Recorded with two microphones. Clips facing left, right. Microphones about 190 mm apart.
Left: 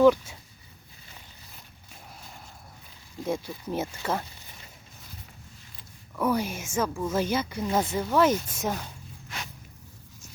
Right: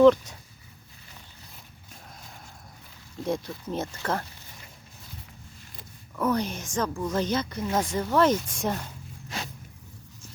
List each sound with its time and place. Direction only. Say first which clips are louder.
0.0 s a woman's voice: right 2 dB; 5° left (ahead or behind)
3.2 s a woman's voice: right 1 dB; 5° left (ahead or behind)
6.1 s a woman's voice: even; 10° left (ahead or behind)